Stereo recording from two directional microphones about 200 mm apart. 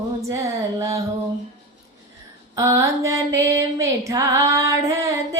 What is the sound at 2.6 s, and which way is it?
Music, 15° right (ahead or behind).